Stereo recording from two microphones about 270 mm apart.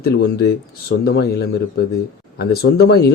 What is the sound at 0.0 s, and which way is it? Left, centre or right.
Speech, left.